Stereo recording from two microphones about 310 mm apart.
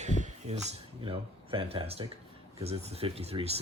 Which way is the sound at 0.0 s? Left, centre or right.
Right.